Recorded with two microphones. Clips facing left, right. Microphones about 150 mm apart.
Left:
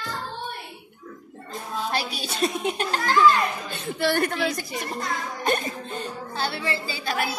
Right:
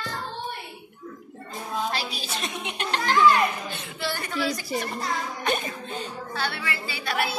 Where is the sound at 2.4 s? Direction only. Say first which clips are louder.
Left 9 dB; 40° left (ahead or behind).